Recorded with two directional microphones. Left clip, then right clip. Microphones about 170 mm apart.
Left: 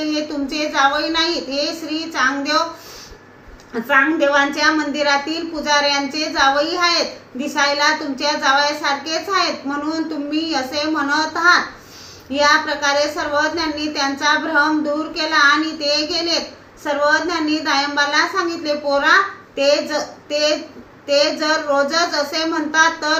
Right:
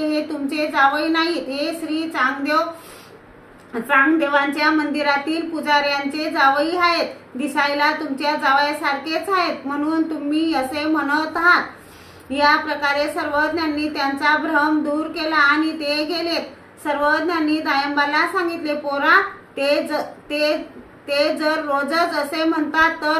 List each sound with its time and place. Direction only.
0.1 s a woman's voice: 20° right (ahead or behind)
3.7 s a woman's voice: 15° right (ahead or behind)